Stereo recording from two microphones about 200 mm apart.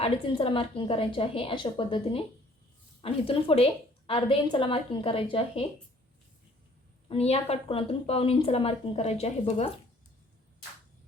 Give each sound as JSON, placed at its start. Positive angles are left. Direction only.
{"t": 0.0, "sound": "a woman's voice", "side_deg": 30}
{"t": 7.1, "sound": "a woman's voice", "side_deg": 30}